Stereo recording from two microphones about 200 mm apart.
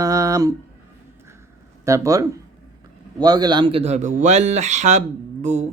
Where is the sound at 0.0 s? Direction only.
15° right (ahead or behind).